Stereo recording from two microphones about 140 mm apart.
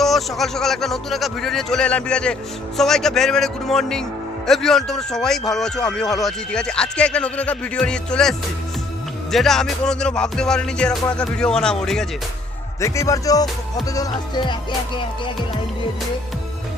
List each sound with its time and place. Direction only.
0.0 s a man's voice: centre (ahead or behind)
12.8 s speech: 20° left (ahead or behind)